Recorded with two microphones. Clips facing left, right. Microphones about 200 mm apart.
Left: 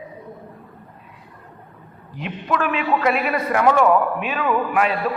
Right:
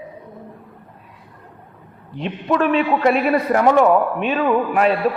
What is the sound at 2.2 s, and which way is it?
A man's voice, 35° right (ahead or behind).